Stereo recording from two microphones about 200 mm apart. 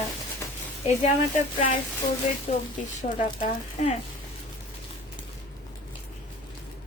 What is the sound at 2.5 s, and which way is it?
Speech, 35° left (ahead or behind).